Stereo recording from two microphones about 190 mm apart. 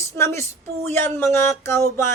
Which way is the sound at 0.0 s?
15° left (ahead or behind).